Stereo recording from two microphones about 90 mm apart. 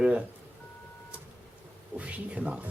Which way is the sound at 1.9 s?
15° right (ahead or behind).